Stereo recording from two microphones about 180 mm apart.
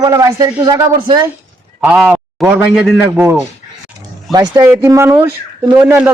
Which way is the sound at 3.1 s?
10° right (ahead or behind).